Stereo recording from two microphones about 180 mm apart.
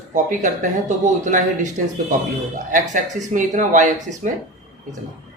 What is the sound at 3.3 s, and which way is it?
Speech, 45° right (ahead or behind).